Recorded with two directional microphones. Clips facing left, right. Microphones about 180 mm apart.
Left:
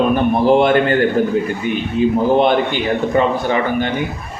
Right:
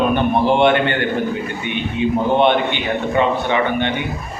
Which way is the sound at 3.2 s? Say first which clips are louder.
Right 1 dB; 40° left (ahead or behind).